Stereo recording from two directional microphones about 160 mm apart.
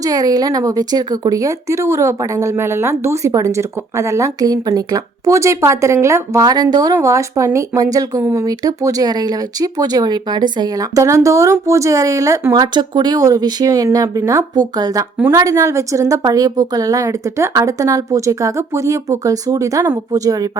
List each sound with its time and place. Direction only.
0.0 s a woman's voice: 25° right (ahead or behind)